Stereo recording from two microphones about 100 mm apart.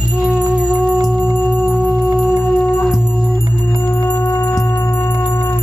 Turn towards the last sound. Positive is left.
turn(degrees=20)  # may be behind; listen again after turning